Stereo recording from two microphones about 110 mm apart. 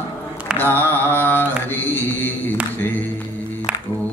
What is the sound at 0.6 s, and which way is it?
Mantra, 20° left (ahead or behind).